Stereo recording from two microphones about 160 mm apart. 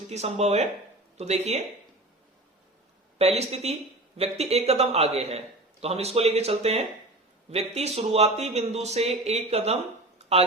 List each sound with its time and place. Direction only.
0.1 s speech: 40° right (ahead or behind)
3.2 s speech: 40° right (ahead or behind)